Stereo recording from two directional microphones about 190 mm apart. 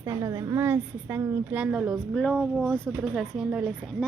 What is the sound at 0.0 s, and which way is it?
A woman's voice, 15° right (ahead or behind).